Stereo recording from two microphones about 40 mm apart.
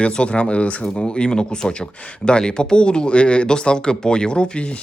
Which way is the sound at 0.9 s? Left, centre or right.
Left.